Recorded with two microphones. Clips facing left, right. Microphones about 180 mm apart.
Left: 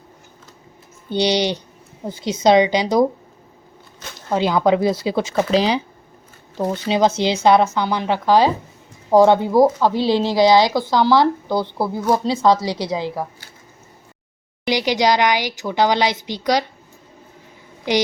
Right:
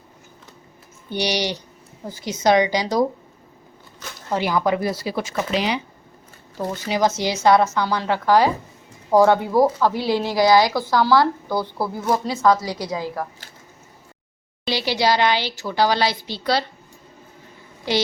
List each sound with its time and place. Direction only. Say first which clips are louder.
1.1 s speech: left 5 dB; 25° left (ahead or behind)
4.3 s speech: left 4 dB; 20° left (ahead or behind)
6.8 s speech: left 3 dB; 25° left (ahead or behind)
14.7 s a woman's voice: left 3 dB; 15° left (ahead or behind)